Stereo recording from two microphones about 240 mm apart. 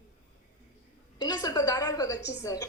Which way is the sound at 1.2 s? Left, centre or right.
Centre.